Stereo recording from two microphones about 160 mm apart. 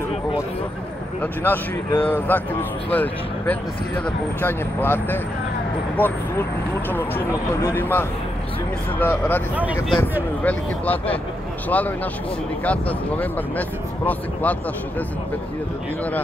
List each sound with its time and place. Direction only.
1.2 s speech: 10° left (ahead or behind)
10.4 s speech: 10° left (ahead or behind)